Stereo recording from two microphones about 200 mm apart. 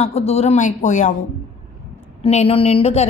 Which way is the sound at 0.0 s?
30° left (ahead or behind).